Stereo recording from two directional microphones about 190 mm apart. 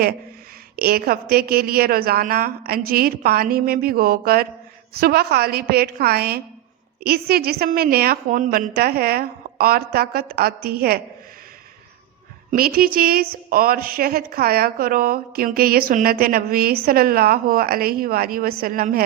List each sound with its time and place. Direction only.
0.8 s a woman's voice: 55° right (ahead or behind)
12.5 s a woman's voice: 50° right (ahead or behind)